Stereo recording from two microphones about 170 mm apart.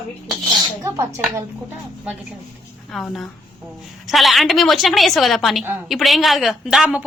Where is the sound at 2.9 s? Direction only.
Centre (ahead or behind).